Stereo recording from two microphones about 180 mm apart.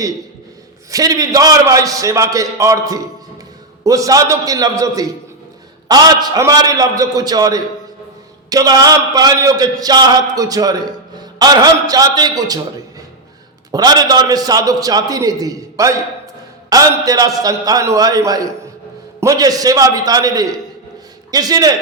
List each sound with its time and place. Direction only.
0.9 s a man's voice: 20° right (ahead or behind)
13.7 s a man's voice: 20° right (ahead or behind)